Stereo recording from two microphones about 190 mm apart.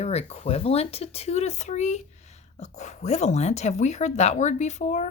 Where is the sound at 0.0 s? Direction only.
35° left (ahead or behind).